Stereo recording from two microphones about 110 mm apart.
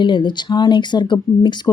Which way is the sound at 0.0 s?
45° left (ahead or behind).